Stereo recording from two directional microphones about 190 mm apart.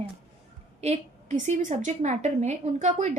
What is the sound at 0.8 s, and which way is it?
A woman's voice, 35° right (ahead or behind).